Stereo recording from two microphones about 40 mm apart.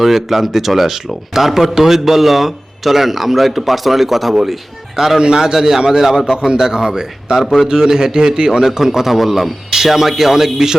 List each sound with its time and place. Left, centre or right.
0.0 s a man's voice: centre